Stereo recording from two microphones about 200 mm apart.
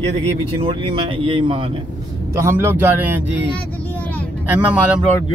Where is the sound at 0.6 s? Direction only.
25° right (ahead or behind).